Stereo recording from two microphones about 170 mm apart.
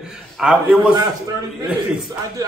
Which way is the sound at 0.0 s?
5° right (ahead or behind).